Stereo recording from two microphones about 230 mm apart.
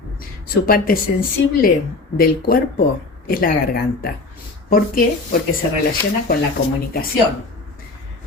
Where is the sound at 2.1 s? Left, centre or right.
Left.